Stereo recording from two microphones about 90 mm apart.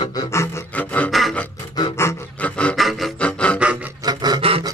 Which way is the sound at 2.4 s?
15° left (ahead or behind).